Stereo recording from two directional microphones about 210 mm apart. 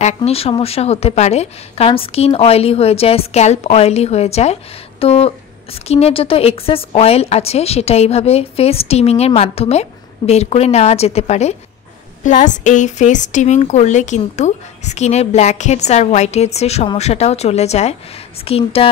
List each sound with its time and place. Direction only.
0.0 s a woman's voice: 30° left (ahead or behind)